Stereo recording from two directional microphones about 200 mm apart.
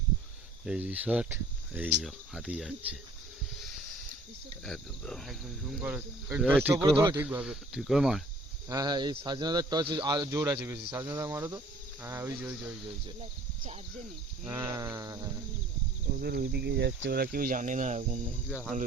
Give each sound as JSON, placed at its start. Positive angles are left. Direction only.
{"t": 0.6, "sound": "speech", "side_deg": -5}
{"t": 4.6, "sound": "speech", "side_deg": 0}
{"t": 5.8, "sound": "speech", "side_deg": -10}
{"t": 6.8, "sound": "speech", "side_deg": -20}
{"t": 8.7, "sound": "speech", "side_deg": -20}
{"t": 14.4, "sound": "speech", "side_deg": -15}
{"t": 16.1, "sound": "speech", "side_deg": -50}